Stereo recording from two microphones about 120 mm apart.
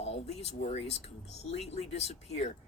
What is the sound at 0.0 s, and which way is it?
Speech, 65° left (ahead or behind).